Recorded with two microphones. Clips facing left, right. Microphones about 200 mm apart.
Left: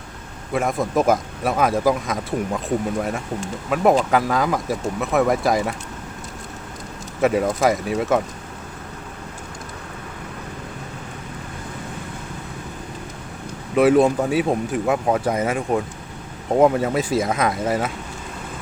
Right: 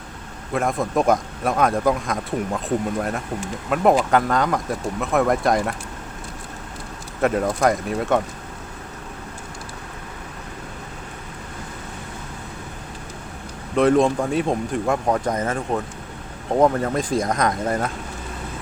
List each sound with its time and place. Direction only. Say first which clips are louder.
0.5 s speech: left 1 dB; centre (ahead or behind)
7.2 s speech: left 1 dB; 5° left (ahead or behind)
13.7 s speech: left 2 dB; 5° left (ahead or behind)